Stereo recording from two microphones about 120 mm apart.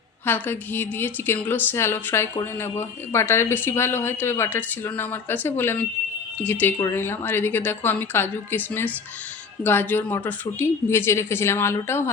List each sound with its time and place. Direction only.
0.3 s a woman's voice: 15° left (ahead or behind)